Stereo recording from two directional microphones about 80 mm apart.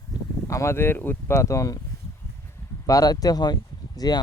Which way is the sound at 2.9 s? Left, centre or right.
Left.